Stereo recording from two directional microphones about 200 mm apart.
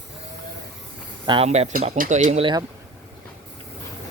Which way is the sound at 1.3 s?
30° right (ahead or behind).